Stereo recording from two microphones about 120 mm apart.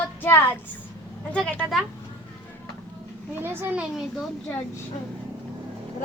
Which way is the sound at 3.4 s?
20° right (ahead or behind).